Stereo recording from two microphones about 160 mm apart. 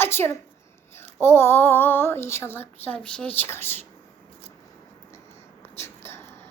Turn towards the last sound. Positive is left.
turn(degrees=15)  # may be behind; listen again after turning